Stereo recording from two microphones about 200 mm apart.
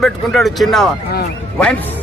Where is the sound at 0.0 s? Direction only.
Centre (ahead or behind).